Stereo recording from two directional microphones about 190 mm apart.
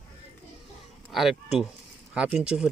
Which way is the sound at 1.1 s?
Centre (ahead or behind).